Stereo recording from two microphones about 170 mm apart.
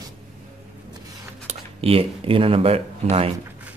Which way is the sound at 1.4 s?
35° right (ahead or behind).